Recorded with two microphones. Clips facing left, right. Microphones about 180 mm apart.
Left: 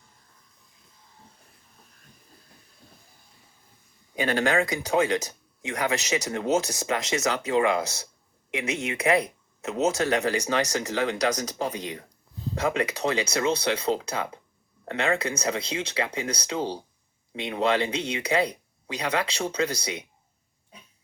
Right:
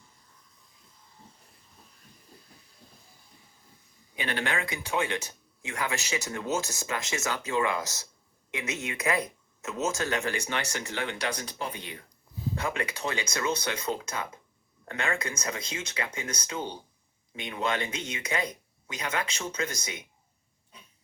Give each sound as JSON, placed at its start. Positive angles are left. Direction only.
{"t": 4.1, "sound": "speech", "side_deg": 40}
{"t": 8.4, "sound": "speech", "side_deg": 30}